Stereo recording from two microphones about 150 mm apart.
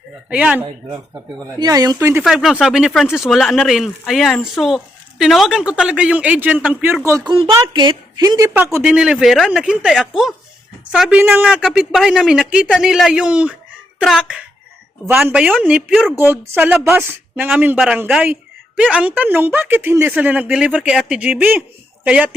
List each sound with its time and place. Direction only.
0.3 s speech: 10° right (ahead or behind)
1.5 s a woman's voice: 25° right (ahead or behind)
2.2 s speech: centre (ahead or behind)
7.3 s a woman's voice: 35° right (ahead or behind); by 11.2 s centre (ahead or behind)
11.2 s speech: 15° right (ahead or behind)